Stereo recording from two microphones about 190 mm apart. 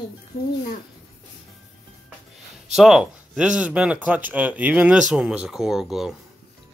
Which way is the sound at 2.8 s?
5° right (ahead or behind).